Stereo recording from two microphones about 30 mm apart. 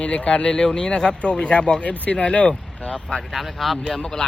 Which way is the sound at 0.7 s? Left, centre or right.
Left.